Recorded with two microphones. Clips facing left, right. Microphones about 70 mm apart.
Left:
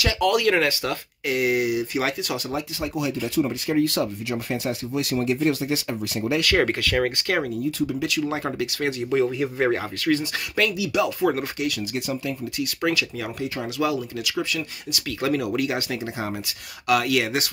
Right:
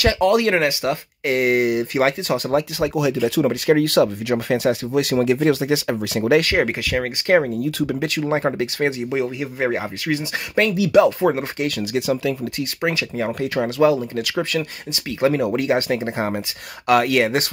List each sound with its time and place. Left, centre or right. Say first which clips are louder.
0.2 s speech: right 1 dB; right
1.2 s speech: right 4 dB; right
2.8 s speech: right 7 dB; right
6.5 s speech: right 1 dB; centre
7.2 s speech: right 8 dB; right
7.8 s speech: right 3 dB; right
8.1 s speech: right 5 dB; right
9.1 s speech: left 1 dB; centre
10.8 s speech: right 9 dB; right
11.9 s speech: right 7 dB; right
12.9 s speech: left 1 dB; right
13.7 s speech: right 8 dB; right
14.2 s speech: right 4 dB; right
14.9 s speech: right 5 dB; right